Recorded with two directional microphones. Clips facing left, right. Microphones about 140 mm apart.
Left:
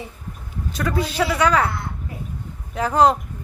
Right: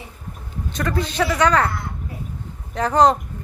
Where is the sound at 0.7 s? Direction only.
5° left (ahead or behind).